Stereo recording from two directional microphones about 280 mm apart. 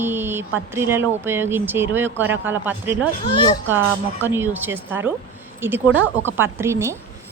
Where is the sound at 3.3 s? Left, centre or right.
Centre.